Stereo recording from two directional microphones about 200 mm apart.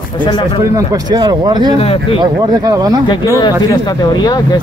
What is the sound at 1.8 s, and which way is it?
Speech, 30° left (ahead or behind).